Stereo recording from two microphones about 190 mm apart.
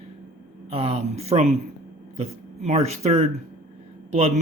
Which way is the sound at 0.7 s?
30° right (ahead or behind).